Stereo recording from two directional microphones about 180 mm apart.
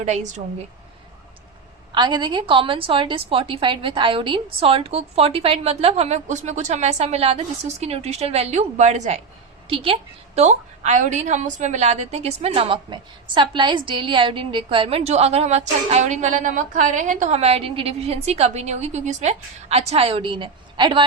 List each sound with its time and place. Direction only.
0.0 s a woman's voice: 40° right (ahead or behind)
1.9 s a woman's voice: 25° right (ahead or behind)